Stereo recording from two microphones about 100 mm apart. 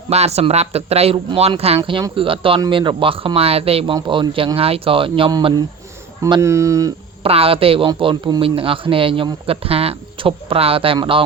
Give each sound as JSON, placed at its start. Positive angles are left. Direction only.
{"t": 0.1, "sound": "a man's voice", "side_deg": -90}
{"t": 1.8, "sound": "speech", "side_deg": -50}
{"t": 2.1, "sound": "speech", "side_deg": -60}
{"t": 3.9, "sound": "speech", "side_deg": -50}
{"t": 6.4, "sound": "speech", "side_deg": -30}
{"t": 7.2, "sound": "a woman's voice", "side_deg": -70}
{"t": 10.9, "sound": "speech", "side_deg": -55}